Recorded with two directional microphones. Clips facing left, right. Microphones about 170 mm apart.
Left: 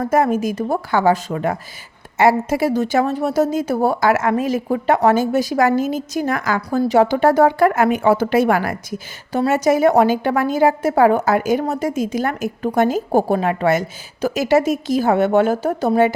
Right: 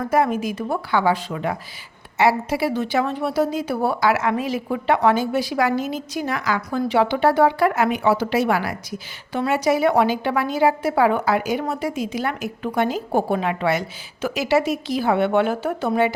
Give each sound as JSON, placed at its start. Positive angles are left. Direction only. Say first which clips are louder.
{"t": 0.0, "sound": "a woman's voice", "louder": "left 3 dB", "side_deg": 45}